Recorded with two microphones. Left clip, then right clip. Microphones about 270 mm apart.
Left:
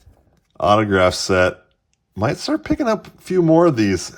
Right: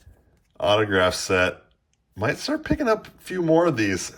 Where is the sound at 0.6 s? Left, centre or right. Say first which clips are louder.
Left 5 dB; left.